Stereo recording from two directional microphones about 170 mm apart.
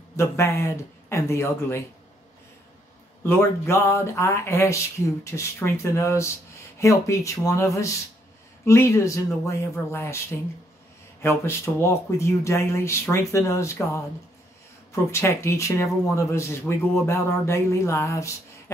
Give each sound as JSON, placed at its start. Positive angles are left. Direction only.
{"t": 0.1, "sound": "speech", "side_deg": 15}
{"t": 3.3, "sound": "speech", "side_deg": 15}
{"t": 11.2, "sound": "speech", "side_deg": 15}